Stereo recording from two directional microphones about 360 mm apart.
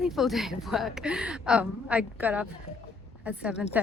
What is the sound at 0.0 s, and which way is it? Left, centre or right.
A woman's voice, centre.